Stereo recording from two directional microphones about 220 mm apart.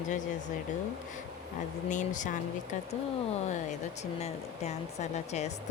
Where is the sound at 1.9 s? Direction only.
35° left (ahead or behind).